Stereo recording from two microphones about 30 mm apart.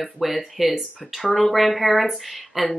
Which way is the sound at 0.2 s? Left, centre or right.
Centre.